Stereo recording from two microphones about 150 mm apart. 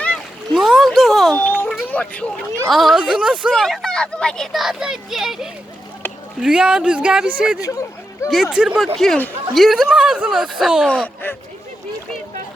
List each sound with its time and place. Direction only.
0.0 s splash: 5° left (ahead or behind)
1.6 s a sound: centre (ahead or behind)
1.9 s speech: 10° left (ahead or behind); by 7.6 s 5° right (ahead or behind)
7.6 s speech: 20° left (ahead or behind)
8.3 s speech: 5° right (ahead or behind)
10.8 s speech: 10° left (ahead or behind)